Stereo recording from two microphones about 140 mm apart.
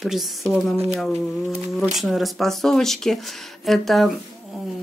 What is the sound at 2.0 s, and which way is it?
Speech, centre (ahead or behind).